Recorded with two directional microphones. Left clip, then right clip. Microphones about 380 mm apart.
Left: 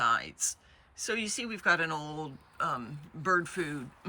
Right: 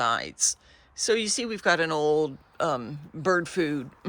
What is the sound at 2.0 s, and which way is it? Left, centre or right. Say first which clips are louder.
Speech: right 16 dB; right.